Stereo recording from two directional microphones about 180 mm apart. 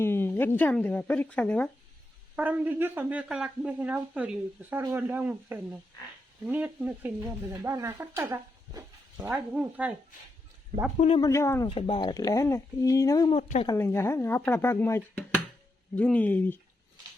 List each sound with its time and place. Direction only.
0.0 s speech: 10° left (ahead or behind)
2.3 s speech: 10° right (ahead or behind)
9.3 s speech: 5° right (ahead or behind)
10.9 s speech: 35° left (ahead or behind)
11.2 s speech: 15° left (ahead or behind)
11.7 s speech: 30° left (ahead or behind)
13.3 s speech: 35° left (ahead or behind)
13.7 s speech: 15° left (ahead or behind)